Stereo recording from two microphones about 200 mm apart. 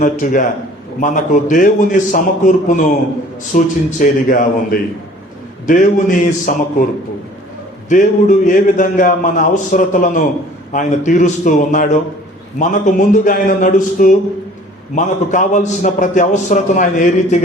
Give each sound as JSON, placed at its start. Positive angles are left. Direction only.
{"t": 0.0, "sound": "a man's voice", "side_deg": 40}
{"t": 7.9, "sound": "a man's voice", "side_deg": 40}